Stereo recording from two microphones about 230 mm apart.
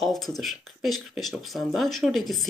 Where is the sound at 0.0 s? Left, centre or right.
Centre.